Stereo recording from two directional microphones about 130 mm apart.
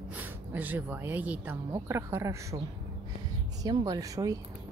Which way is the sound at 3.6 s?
30° right (ahead or behind).